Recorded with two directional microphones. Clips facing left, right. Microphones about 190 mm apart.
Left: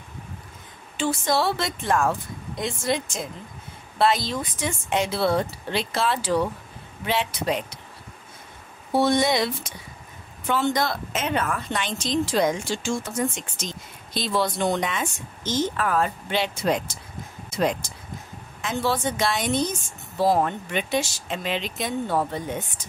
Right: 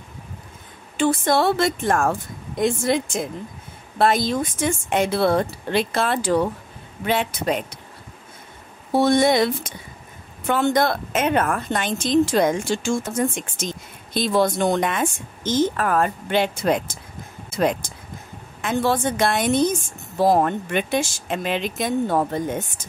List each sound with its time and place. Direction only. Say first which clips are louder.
0.9 s a woman's voice: right 4 dB; 55° right (ahead or behind)
8.9 s a woman's voice: right 4 dB; 50° right (ahead or behind)
18.6 s a woman's voice: right 4 dB; 55° right (ahead or behind)